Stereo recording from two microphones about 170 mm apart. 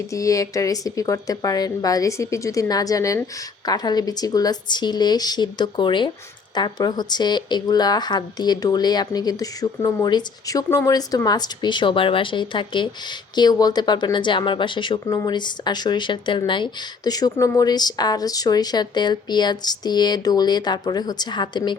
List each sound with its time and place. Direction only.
0.1 s a woman's voice: 20° left (ahead or behind)